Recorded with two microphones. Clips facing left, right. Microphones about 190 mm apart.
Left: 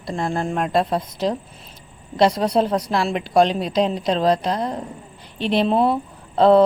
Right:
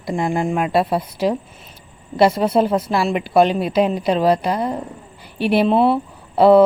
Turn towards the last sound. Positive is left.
turn(degrees=-5)  # may be behind; listen again after turning